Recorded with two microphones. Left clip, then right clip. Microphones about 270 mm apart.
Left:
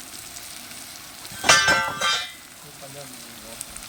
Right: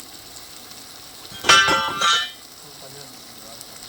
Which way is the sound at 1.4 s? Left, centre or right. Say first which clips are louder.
Right 2 dB; left.